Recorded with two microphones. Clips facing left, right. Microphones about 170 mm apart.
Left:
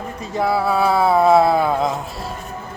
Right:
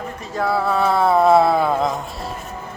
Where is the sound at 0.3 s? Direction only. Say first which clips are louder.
Left 1 dB; 10° left (ahead or behind).